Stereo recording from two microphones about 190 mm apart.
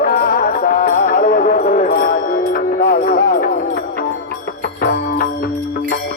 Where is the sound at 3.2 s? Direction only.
55° left (ahead or behind).